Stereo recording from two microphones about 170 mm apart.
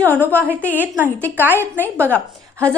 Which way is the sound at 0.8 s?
10° right (ahead or behind).